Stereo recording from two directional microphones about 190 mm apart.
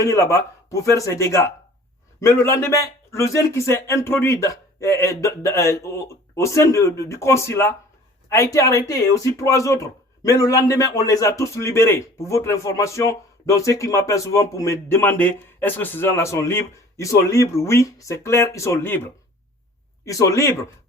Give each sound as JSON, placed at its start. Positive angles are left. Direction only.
{"t": 0.0, "sound": "speech", "side_deg": 15}
{"t": 20.1, "sound": "speech", "side_deg": 15}